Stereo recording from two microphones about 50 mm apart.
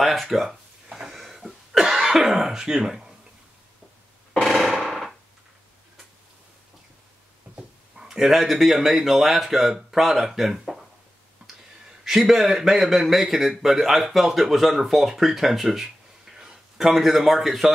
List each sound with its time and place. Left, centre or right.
0.0 s speech: centre
0.8 s a sound: centre
1.1 s cough: centre
7.5 s speech: centre
11.4 s a sound: centre
12.0 s speech: centre